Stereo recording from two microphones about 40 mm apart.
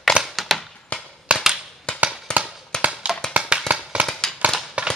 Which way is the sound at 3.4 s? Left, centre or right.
Right.